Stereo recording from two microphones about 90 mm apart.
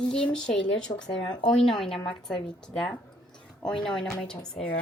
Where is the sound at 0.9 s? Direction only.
55° left (ahead or behind).